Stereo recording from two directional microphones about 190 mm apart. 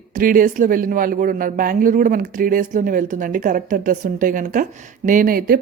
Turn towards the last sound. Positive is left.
turn(degrees=-50)  # may be behind; listen again after turning